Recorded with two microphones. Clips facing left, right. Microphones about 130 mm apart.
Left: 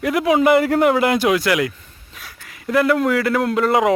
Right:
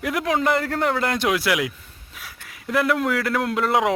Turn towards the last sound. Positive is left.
turn(degrees=0)  # may be behind; listen again after turning